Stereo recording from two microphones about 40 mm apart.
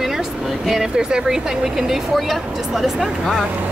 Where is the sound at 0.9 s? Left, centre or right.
Centre.